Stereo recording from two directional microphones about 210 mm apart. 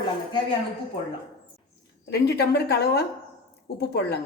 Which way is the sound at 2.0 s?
50° left (ahead or behind).